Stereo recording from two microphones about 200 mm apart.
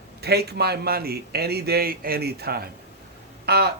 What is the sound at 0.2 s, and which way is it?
Speech, 55° right (ahead or behind).